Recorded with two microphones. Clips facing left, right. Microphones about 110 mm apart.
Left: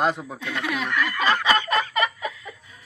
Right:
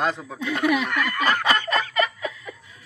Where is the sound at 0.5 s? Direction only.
50° right (ahead or behind).